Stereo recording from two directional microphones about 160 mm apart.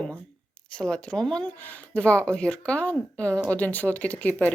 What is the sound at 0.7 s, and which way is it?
Speech, 5° left (ahead or behind).